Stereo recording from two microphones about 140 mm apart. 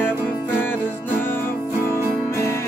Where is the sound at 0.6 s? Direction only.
15° left (ahead or behind).